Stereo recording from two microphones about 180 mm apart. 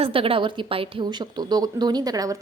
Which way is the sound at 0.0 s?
30° right (ahead or behind).